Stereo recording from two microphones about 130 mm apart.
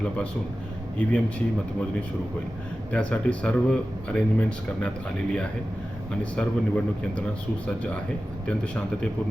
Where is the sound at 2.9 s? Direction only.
10° left (ahead or behind).